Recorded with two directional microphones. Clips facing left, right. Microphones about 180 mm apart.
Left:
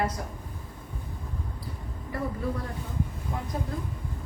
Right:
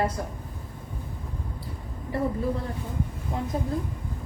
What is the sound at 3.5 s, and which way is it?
Speech, 30° right (ahead or behind).